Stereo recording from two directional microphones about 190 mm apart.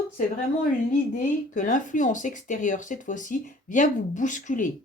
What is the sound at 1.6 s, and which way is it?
Speech, 45° left (ahead or behind).